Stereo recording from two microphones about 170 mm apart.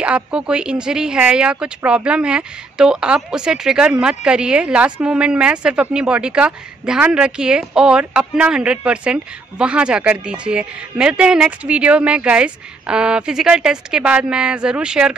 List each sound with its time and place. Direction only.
0.0 s a woman's voice: 5° right (ahead or behind)